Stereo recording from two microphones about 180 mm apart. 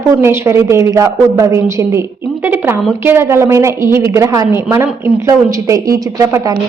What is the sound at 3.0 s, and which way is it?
A woman's voice, 15° right (ahead or behind).